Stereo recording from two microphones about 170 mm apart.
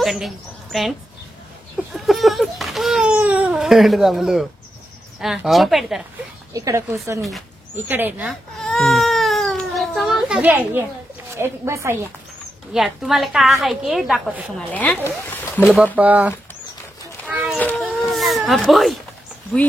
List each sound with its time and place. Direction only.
0.0 s a woman's voice: centre (ahead or behind)
1.8 s babbling: centre (ahead or behind)
5.2 s a woman's voice: centre (ahead or behind)
6.5 s speech: 20° right (ahead or behind)
7.2 s a woman's voice: centre (ahead or behind)
7.7 s speech: 10° right (ahead or behind)
8.3 s baby cry: centre (ahead or behind)
11.3 s speech: 15° right (ahead or behind)
12.7 s a woman's voice: centre (ahead or behind)
14.7 s speech: 10° left (ahead or behind)
16.0 s speech: 10° right (ahead or behind)
17.3 s a sound: 5° right (ahead or behind)
17.6 s a sound: 10° left (ahead or behind)